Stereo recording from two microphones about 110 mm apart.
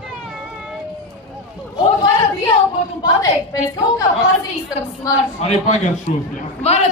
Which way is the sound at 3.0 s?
30° left (ahead or behind).